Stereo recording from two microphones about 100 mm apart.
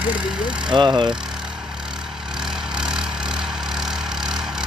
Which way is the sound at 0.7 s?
50° right (ahead or behind).